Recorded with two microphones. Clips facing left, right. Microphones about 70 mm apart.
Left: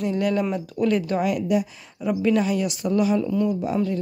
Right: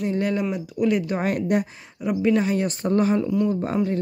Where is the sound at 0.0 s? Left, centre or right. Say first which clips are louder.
Left 1 dB; right.